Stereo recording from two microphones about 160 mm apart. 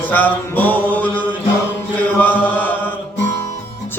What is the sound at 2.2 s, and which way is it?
Chant, 10° left (ahead or behind).